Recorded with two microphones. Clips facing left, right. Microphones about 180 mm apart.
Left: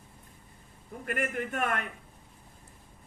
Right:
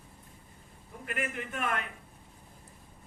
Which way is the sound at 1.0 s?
45° left (ahead or behind).